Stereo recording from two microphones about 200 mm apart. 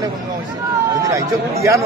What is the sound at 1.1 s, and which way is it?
Speech, 15° right (ahead or behind).